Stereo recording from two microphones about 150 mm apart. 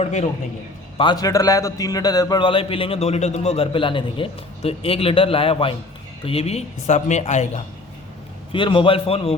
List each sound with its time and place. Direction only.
0.0 s speech: 50° left (ahead or behind)
0.9 s a man's voice: 30° left (ahead or behind); by 7.6 s 50° left (ahead or behind)
8.5 s a man's voice: 35° left (ahead or behind)